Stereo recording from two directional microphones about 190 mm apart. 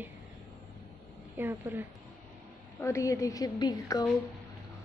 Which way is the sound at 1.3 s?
10° right (ahead or behind).